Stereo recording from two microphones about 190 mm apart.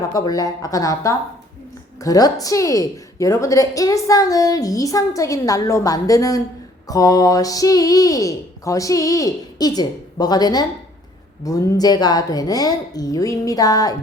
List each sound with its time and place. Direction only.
0.1 s a woman's voice: 20° left (ahead or behind)